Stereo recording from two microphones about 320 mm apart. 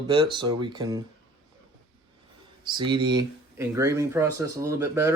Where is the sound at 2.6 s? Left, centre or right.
Centre.